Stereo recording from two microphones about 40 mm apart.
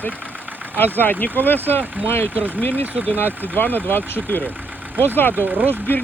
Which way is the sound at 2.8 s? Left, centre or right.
Right.